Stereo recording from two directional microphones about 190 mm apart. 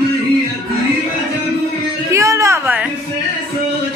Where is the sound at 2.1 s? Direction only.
15° right (ahead or behind).